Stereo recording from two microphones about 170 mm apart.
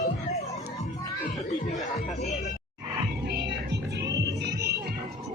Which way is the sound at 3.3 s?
85° right.